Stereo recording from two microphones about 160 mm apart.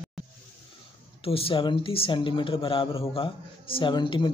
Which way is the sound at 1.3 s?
35° left (ahead or behind).